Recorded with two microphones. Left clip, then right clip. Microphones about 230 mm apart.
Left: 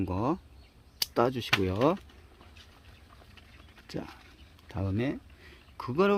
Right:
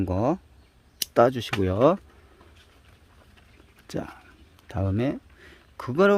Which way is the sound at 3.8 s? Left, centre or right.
Right.